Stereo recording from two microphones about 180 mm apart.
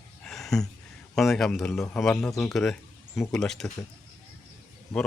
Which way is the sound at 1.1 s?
Centre (ahead or behind).